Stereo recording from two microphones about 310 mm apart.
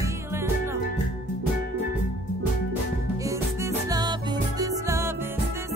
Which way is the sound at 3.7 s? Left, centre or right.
Centre.